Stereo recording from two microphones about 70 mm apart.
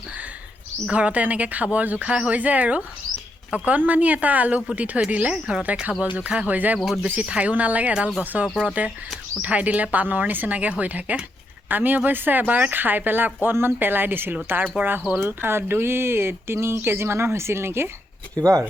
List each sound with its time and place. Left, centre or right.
0.9 s speech: centre; by 17.9 s right